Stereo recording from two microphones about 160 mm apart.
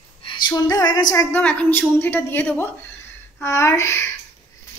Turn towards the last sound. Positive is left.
turn(degrees=20)  # may be behind; listen again after turning